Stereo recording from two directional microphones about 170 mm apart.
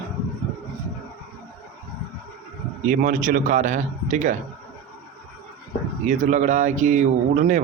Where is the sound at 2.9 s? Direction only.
50° right (ahead or behind).